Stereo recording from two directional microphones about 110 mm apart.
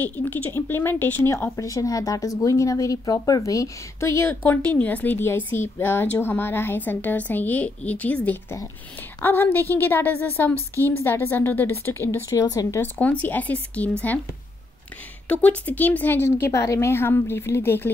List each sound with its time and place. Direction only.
0.0 s speech: 15° left (ahead or behind)
12.3 s a woman's voice: 35° left (ahead or behind)
12.8 s speech: 15° left (ahead or behind)
15.2 s speech: 10° left (ahead or behind)